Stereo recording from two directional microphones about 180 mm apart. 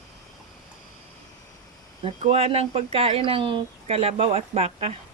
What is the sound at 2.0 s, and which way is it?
Speech, 35° right (ahead or behind).